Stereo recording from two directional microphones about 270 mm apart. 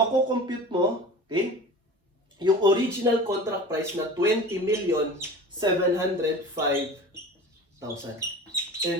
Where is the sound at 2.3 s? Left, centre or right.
Centre.